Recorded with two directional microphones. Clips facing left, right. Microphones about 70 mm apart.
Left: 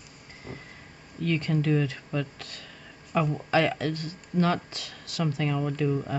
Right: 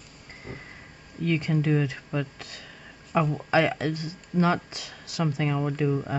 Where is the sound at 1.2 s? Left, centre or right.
Centre.